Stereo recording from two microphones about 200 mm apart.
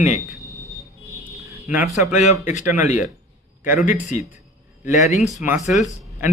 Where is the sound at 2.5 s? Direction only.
40° left (ahead or behind).